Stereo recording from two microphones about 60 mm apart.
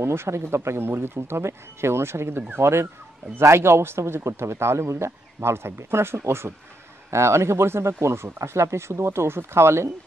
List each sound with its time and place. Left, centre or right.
0.0 s speech: right